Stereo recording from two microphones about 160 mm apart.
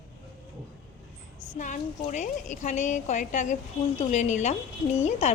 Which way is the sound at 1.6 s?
50° left (ahead or behind).